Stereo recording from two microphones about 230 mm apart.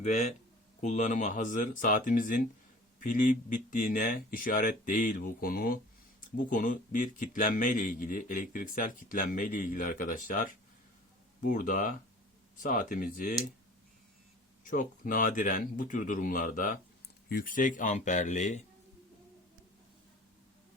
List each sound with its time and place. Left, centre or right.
0.0 s speech: left
14.6 s speech: left